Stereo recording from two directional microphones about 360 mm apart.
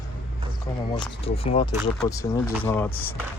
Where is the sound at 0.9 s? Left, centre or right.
Centre.